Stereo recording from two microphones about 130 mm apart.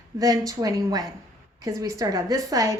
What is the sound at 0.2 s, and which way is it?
A woman's voice, 30° right (ahead or behind).